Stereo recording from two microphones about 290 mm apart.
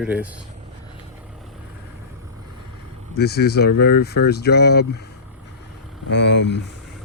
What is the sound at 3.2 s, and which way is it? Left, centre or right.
Speech, left.